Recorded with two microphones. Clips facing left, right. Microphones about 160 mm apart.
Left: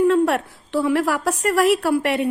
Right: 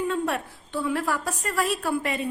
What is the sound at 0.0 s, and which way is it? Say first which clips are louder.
A woman's voice: left 10 dB; 70° left (ahead or behind).